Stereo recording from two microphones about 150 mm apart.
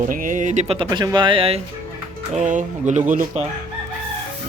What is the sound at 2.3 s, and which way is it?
Speech, 55° right (ahead or behind).